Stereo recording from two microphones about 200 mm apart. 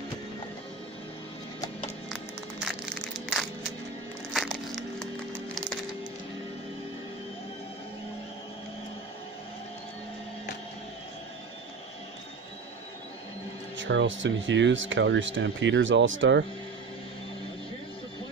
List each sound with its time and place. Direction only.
2.6 s crushing: centre (ahead or behind)
4.3 s music: centre (ahead or behind)
13.7 s speech: 65° right (ahead or behind)